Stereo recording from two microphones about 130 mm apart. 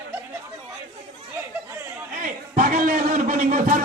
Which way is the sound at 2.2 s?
90° right.